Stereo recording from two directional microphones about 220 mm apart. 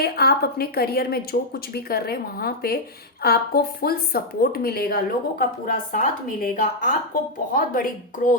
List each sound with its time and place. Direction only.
0.0 s a woman's voice: 45° left (ahead or behind)